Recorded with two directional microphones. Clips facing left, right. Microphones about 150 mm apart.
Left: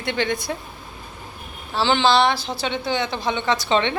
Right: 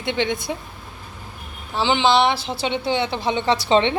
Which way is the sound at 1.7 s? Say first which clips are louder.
Even; 15° right (ahead or behind).